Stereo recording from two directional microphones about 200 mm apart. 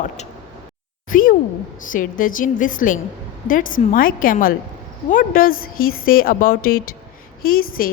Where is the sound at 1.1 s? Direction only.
45° left (ahead or behind).